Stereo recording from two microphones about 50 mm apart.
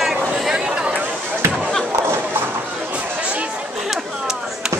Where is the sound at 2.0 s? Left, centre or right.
Right.